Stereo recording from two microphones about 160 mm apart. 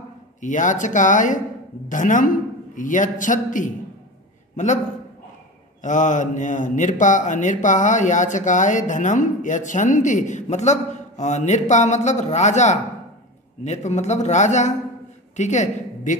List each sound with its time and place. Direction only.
0.4 s speech: 50° left (ahead or behind)
5.8 s a woman's voice: 50° left (ahead or behind)